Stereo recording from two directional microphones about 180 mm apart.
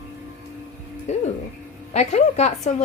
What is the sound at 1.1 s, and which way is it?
A woman's voice, 40° left (ahead or behind).